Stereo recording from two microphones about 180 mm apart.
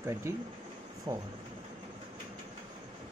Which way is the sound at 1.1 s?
25° right (ahead or behind).